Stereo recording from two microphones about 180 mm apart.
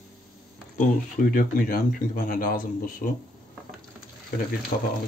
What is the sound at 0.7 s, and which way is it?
Speech, 50° left (ahead or behind).